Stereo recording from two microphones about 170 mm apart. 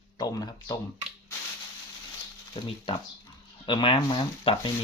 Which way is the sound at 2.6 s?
30° left (ahead or behind).